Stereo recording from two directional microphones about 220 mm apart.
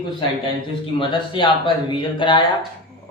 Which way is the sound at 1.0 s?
20° left (ahead or behind).